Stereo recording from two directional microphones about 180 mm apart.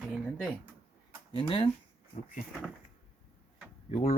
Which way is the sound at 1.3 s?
30° left (ahead or behind).